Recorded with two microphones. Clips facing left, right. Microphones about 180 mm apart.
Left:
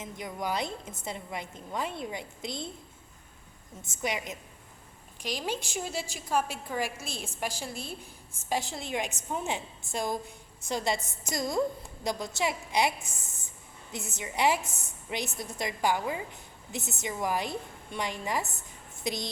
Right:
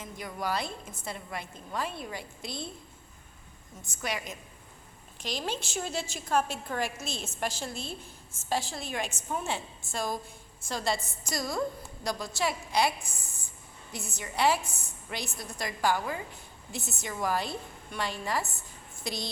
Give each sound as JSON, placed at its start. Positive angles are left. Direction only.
{"t": 0.0, "sound": "a woman's voice", "side_deg": 20}
{"t": 3.8, "sound": "a woman's voice", "side_deg": 20}